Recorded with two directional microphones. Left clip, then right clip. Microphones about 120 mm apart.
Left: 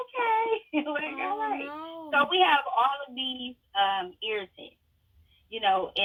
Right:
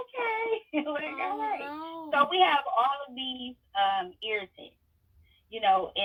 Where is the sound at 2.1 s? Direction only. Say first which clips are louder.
Left 1 dB; 20° left (ahead or behind).